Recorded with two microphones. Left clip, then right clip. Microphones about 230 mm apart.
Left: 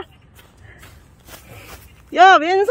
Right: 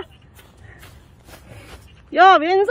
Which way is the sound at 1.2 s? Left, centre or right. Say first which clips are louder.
Left 3 dB; left.